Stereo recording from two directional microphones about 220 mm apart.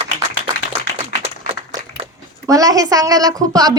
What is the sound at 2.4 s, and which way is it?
A woman's voice, 15° right (ahead or behind).